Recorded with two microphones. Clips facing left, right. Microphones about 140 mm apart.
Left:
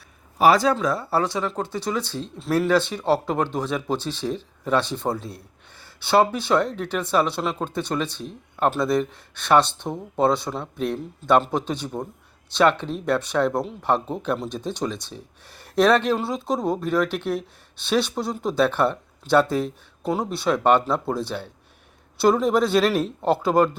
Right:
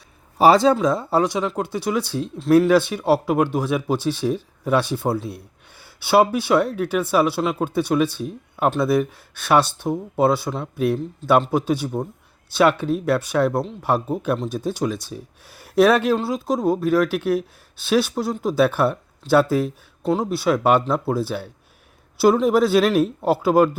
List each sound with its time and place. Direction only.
0.3 s speech: 25° right (ahead or behind); by 23.7 s 5° right (ahead or behind)